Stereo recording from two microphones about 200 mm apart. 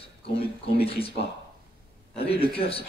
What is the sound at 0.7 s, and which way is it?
Speech, 30° left (ahead or behind).